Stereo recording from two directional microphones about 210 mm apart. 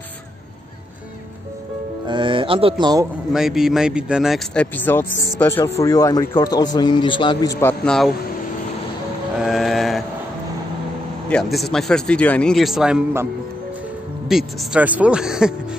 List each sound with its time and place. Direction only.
2.0 s music: 25° right (ahead or behind)
3.3 s a man's voice: centre (ahead or behind); by 7.5 s 25° left (ahead or behind)
7.6 s speech: 5° left (ahead or behind)
9.4 s a sound: centre (ahead or behind)
11.5 s speech: centre (ahead or behind)